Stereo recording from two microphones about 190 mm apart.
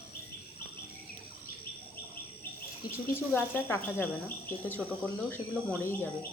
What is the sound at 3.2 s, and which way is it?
Speech, 10° left (ahead or behind).